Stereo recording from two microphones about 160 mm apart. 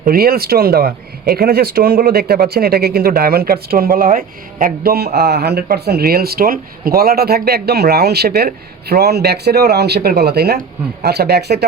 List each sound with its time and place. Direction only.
0.0 s speech: 70° right (ahead or behind); by 11.6 s 90° right